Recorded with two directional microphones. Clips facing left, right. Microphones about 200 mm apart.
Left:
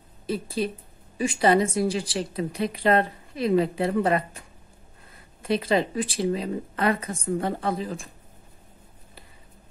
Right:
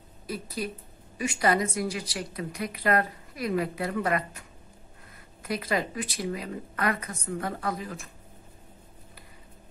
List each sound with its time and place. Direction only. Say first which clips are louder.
0.3 s speech: left 6 dB; 25° left (ahead or behind)
5.4 s speech: left 6 dB; 25° left (ahead or behind)